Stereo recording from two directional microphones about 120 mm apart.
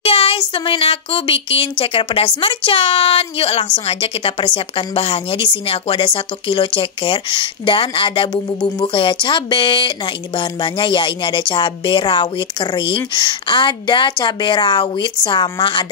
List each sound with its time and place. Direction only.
0.0 s a woman's voice: 50° left (ahead or behind)